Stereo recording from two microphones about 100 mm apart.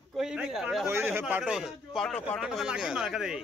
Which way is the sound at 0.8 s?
25° right (ahead or behind).